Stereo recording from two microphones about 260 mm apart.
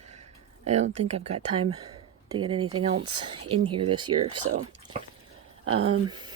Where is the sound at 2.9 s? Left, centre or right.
Right.